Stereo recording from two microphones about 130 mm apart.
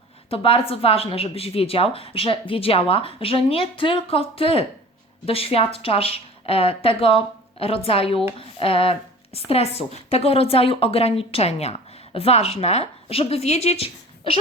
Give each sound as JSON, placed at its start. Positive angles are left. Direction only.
{"t": 0.3, "sound": "speech", "side_deg": 45}